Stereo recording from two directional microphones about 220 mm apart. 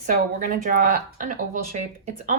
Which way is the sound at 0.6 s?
40° right (ahead or behind).